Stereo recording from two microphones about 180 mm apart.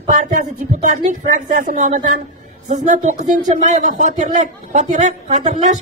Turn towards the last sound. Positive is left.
turn(degrees=-45)  # may be behind; listen again after turning